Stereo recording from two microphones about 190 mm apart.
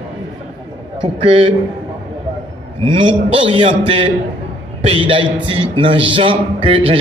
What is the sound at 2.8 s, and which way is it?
A man's voice, 30° right (ahead or behind).